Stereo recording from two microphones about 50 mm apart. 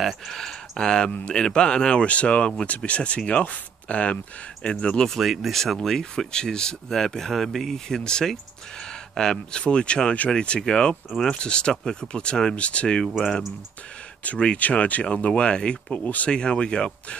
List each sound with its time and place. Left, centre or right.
0.0 s speech: centre
5.1 s speech: centre
14.2 s speech: left